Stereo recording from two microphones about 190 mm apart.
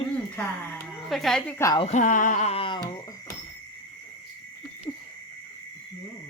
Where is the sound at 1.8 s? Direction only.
40° left (ahead or behind); by 3.3 s 25° left (ahead or behind).